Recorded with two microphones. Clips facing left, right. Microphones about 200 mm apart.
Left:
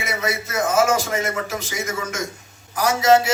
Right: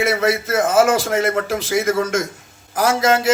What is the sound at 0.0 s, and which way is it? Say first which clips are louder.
A man's voice: right 8 dB; 55° right (ahead or behind).